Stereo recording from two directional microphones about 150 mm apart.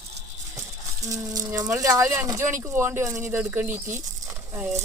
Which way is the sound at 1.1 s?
25° right (ahead or behind).